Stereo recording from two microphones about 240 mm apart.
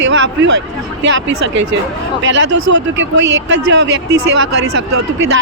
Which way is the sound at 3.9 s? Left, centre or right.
Right.